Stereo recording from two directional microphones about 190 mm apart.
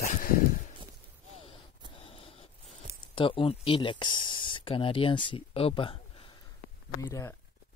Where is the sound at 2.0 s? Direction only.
30° left (ahead or behind).